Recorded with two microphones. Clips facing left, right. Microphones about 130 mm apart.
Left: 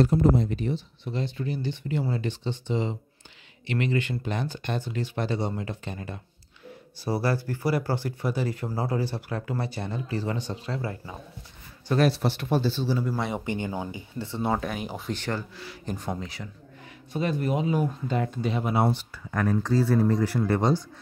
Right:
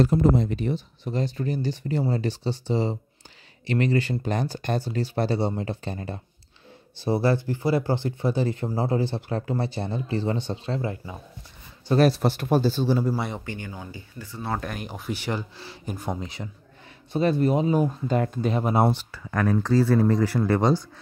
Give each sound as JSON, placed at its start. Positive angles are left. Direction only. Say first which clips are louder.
{"t": 0.1, "sound": "speech", "louder": "right 1 dB", "side_deg": -90}
{"t": 0.7, "sound": "speech", "louder": "right 3 dB", "side_deg": -45}
{"t": 11.9, "sound": "speech", "louder": "right 3 dB", "side_deg": -40}
{"t": 13.5, "sound": "speech", "louder": "left 6 dB", "side_deg": 20}
{"t": 14.6, "sound": "speech", "louder": "left 2 dB", "side_deg": 0}
{"t": 15.1, "sound": "speech", "louder": "right 3 dB", "side_deg": -10}
{"t": 15.5, "sound": "speech", "louder": "left 1 dB", "side_deg": -30}
{"t": 15.8, "sound": "speech", "louder": "right 1 dB", "side_deg": -10}
{"t": 16.2, "sound": "speech", "louder": "right 2 dB", "side_deg": -20}
{"t": 17.1, "sound": "speech", "louder": "right 5 dB", "side_deg": -35}
{"t": 18.9, "sound": "speech", "louder": "right 2 dB", "side_deg": -90}